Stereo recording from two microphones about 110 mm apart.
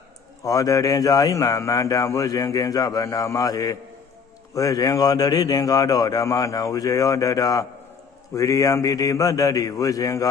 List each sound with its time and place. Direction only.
0.4 s speech: 30° left (ahead or behind)